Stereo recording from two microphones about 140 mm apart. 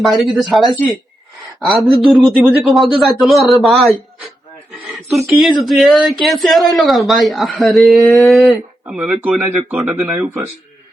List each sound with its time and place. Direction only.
0.0 s speech: centre (ahead or behind)